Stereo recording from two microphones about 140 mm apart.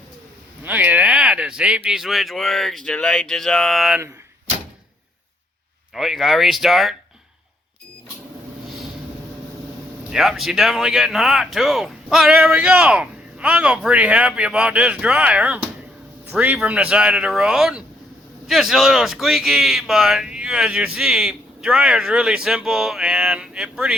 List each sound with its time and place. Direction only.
0.6 s speech: 10° right (ahead or behind)
5.9 s speech: centre (ahead or behind)
10.1 s speech: centre (ahead or behind)